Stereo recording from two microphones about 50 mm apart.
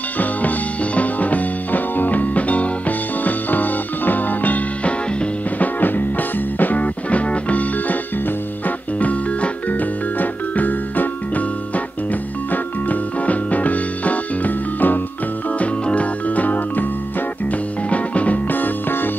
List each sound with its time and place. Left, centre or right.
0.2 s music: left
15.6 s organ: left
17.5 s music: left